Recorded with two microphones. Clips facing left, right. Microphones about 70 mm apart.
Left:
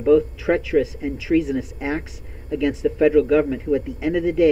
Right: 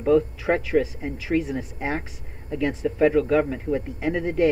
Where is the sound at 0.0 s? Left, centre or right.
Right.